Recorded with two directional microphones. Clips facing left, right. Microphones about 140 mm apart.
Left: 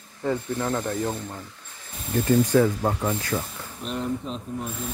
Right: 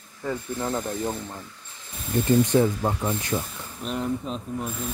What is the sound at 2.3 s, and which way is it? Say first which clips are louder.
Speech: left 1 dB; 20° right (ahead or behind).